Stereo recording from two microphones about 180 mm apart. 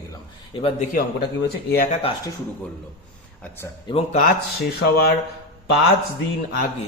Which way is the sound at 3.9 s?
30° left (ahead or behind).